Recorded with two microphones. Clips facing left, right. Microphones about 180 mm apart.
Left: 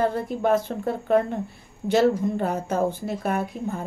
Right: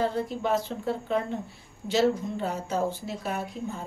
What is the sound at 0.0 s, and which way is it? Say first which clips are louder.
A woman's voice: left 4 dB; 55° left (ahead or behind).